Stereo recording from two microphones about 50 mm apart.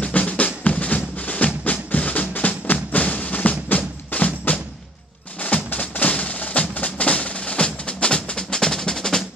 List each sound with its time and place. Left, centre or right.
0.0 s drum: left
5.4 s music: left; by 9.2 s centre